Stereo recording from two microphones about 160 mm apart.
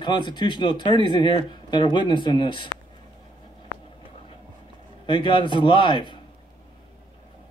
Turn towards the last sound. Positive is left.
turn(degrees=30)  # may be behind; listen again after turning